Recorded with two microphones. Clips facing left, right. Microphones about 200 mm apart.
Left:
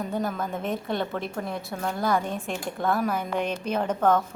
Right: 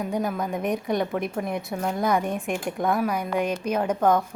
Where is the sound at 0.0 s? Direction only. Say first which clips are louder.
Right 2 dB; 10° right (ahead or behind).